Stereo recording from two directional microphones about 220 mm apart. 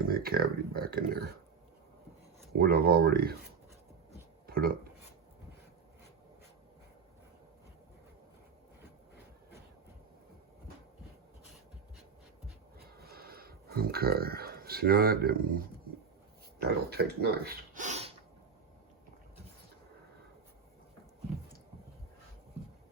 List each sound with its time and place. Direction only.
0.1 s speech: 40° right (ahead or behind)
2.5 s speech: 45° right (ahead or behind)
4.4 s speech: 40° right (ahead or behind)
13.0 s a sound: 45° right (ahead or behind)
16.6 s speech: 45° right (ahead or behind); by 18.1 s 30° right (ahead or behind)